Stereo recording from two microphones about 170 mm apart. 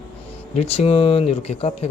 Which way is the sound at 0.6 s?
35° left (ahead or behind).